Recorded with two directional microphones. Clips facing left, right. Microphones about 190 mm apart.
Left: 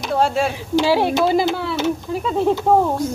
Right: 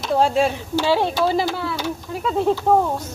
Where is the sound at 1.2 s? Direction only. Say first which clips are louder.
Left 3 dB; 20° left (ahead or behind).